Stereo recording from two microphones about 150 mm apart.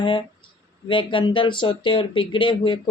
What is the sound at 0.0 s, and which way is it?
Speech, 30° left (ahead or behind).